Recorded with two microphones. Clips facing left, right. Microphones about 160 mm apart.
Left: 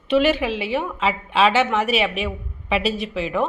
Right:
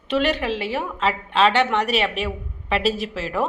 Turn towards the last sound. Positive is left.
turn(degrees=0)  # may be behind; listen again after turning